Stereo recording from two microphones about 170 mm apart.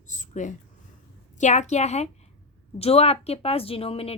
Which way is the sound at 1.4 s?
45° left (ahead or behind).